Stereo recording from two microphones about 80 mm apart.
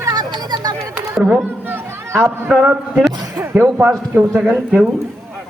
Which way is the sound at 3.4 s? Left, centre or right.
Right.